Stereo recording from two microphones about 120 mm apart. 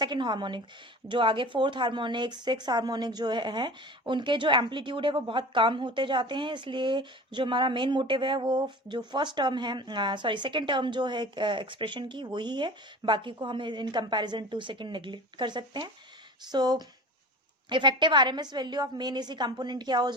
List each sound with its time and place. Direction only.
0.0 s speech: 40° right (ahead or behind)